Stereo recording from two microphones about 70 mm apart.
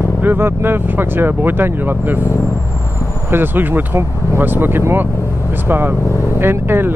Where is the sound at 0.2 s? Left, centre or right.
Right.